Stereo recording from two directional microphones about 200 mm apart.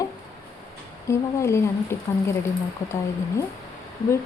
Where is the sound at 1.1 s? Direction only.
15° left (ahead or behind).